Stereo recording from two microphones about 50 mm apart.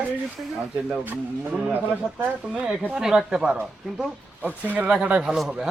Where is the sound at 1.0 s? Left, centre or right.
Right.